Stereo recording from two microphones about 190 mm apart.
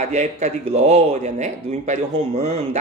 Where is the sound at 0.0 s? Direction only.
40° right (ahead or behind).